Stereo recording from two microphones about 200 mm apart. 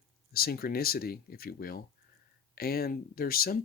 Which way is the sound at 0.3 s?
50° left (ahead or behind).